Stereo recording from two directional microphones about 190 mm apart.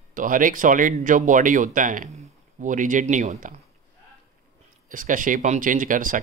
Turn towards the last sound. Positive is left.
turn(degrees=-45)  # may be behind; listen again after turning